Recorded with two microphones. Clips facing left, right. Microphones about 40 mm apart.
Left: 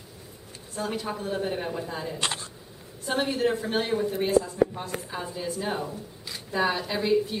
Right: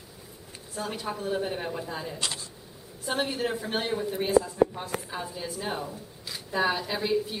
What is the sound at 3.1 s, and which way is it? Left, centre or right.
A woman's voice, centre.